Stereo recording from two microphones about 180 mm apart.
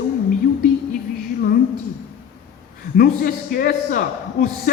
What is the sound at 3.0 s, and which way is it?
A man's voice, 55° left (ahead or behind).